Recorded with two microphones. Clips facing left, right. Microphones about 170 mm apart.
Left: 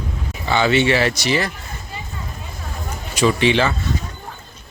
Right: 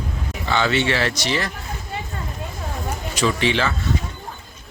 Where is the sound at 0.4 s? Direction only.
15° left (ahead or behind).